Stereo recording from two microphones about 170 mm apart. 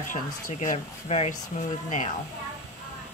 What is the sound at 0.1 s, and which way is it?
Speech, 50° left (ahead or behind).